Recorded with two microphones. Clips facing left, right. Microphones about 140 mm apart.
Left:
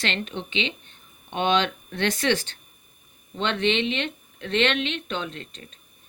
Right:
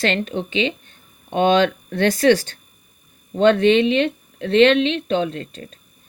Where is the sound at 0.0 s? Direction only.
40° right (ahead or behind).